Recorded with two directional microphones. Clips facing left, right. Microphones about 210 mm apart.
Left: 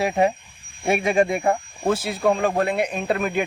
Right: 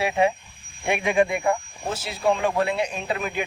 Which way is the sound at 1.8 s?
55° left (ahead or behind).